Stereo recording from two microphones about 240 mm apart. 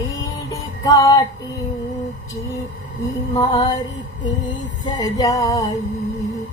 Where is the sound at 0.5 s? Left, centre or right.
Centre.